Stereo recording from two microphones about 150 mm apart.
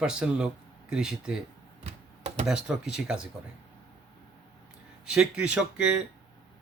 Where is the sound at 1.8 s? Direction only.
50° right (ahead or behind).